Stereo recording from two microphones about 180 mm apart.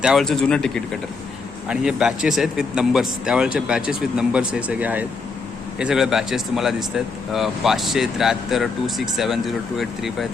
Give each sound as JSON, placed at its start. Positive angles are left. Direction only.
{"t": 0.0, "sound": "speech", "side_deg": 0}